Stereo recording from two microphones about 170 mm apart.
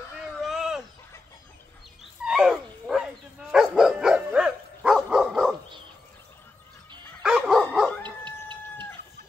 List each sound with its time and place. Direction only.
0.4 s a sound: centre (ahead or behind)
2.2 s dog: 5° right (ahead or behind)
7.2 s dog: 5° right (ahead or behind)
8.0 s chicken: 25° right (ahead or behind)